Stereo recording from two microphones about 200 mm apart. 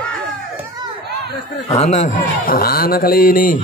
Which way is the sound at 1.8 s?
35° left (ahead or behind).